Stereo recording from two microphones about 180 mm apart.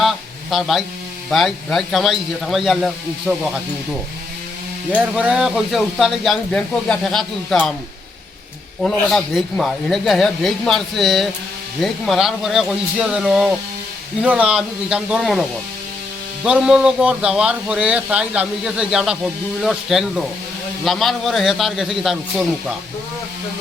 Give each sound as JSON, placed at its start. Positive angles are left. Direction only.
{"t": 0.5, "sound": "speech", "side_deg": 0}
{"t": 4.9, "sound": "speech", "side_deg": -5}
{"t": 8.8, "sound": "speech", "side_deg": 0}